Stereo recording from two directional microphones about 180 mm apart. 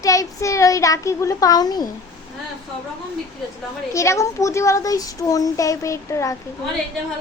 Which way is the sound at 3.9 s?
15° left (ahead or behind).